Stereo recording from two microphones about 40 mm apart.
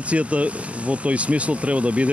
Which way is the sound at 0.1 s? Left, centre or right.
Right.